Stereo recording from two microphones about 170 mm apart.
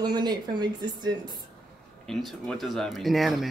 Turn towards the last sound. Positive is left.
turn(degrees=0)  # may be behind; listen again after turning